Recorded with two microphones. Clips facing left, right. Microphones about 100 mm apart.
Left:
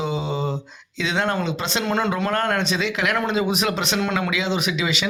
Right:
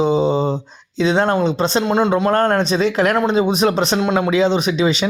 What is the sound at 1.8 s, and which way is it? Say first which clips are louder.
Speech: right 5 dB; 20° right (ahead or behind).